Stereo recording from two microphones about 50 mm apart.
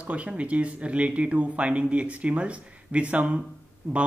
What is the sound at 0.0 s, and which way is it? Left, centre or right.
Speech, right.